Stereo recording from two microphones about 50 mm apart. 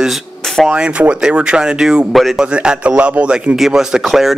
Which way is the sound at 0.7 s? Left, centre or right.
Right.